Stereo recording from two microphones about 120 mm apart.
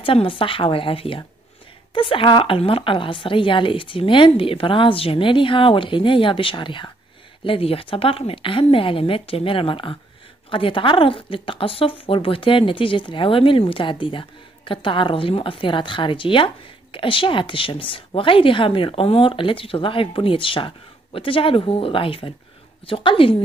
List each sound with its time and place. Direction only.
0.0 s a woman's voice: 50° left (ahead or behind)